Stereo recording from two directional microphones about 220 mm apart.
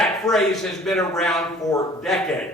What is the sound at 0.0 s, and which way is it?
Speech, centre (ahead or behind).